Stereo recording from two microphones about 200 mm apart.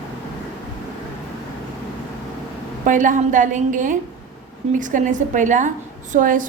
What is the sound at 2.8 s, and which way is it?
A woman's voice, 40° right (ahead or behind).